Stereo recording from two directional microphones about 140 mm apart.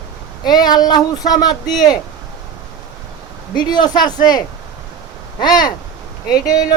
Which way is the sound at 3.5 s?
30° left (ahead or behind).